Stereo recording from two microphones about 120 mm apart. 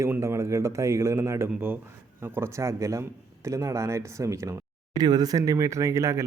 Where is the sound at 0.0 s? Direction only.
20° right (ahead or behind).